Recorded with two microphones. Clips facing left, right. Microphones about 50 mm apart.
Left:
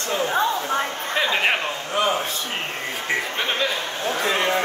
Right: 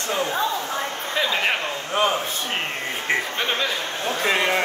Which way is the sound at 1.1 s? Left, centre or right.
Centre.